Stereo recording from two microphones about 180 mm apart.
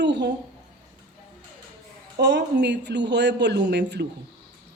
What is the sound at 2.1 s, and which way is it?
Speech, 70° right (ahead or behind).